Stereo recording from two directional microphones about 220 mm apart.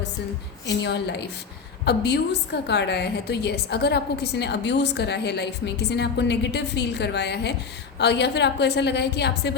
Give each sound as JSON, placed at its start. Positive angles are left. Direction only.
{"t": 0.8, "sound": "a woman's voice", "side_deg": 50}